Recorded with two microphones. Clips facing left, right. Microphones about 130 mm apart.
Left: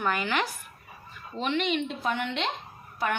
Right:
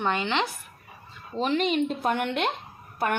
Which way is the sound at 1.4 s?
40° right (ahead or behind).